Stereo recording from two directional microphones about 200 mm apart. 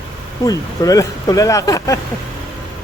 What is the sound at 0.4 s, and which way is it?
Speech, 20° left (ahead or behind).